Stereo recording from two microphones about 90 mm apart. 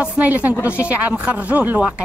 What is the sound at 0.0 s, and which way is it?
Speech, 15° right (ahead or behind).